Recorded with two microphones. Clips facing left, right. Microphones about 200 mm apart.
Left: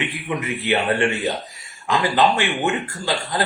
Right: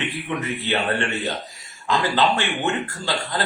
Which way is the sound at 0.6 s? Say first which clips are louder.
Left 6 dB; 15° left (ahead or behind).